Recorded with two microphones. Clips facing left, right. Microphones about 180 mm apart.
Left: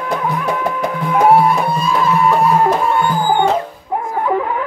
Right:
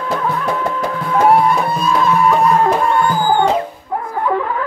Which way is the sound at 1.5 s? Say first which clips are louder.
Even; centre (ahead or behind).